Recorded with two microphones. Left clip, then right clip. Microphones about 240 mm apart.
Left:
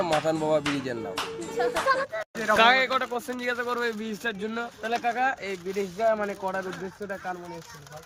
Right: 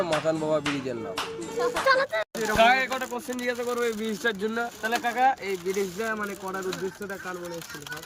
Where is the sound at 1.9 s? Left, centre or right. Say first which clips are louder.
Right 3 dB; right.